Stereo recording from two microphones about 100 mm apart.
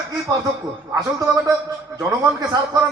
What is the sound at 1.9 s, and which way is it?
Speech, 40° right (ahead or behind).